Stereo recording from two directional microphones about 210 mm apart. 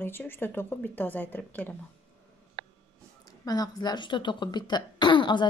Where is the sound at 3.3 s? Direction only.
20° left (ahead or behind).